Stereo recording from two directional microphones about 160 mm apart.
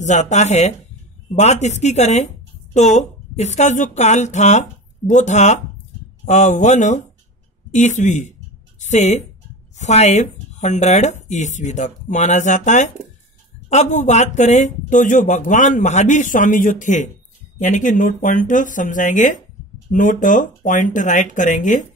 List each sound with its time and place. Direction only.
0.0 s a woman's voice: 45° left (ahead or behind)